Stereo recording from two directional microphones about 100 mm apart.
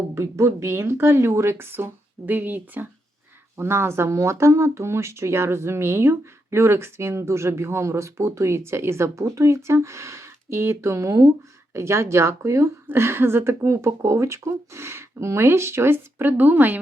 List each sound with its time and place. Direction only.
0.1 s speech: 30° right (ahead or behind)